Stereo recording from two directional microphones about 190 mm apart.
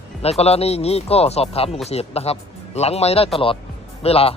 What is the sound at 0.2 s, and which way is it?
Speech, 35° left (ahead or behind).